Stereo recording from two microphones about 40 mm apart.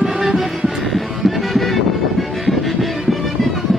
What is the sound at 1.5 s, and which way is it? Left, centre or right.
Music, centre.